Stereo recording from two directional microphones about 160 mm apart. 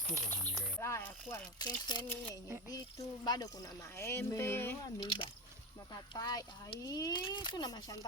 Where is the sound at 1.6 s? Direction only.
25° left (ahead or behind).